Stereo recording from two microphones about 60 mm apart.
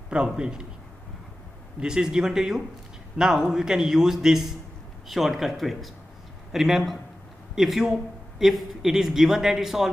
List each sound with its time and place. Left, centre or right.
0.1 s a man's voice: centre
1.8 s a man's voice: centre